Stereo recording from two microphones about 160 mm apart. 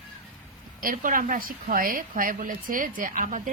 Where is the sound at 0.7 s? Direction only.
60° right (ahead or behind).